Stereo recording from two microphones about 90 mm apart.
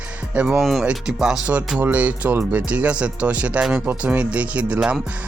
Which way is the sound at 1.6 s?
15° right (ahead or behind).